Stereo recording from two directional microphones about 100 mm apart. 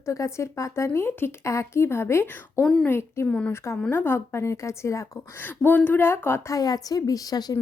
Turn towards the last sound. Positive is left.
turn(degrees=40)  # may be behind; listen again after turning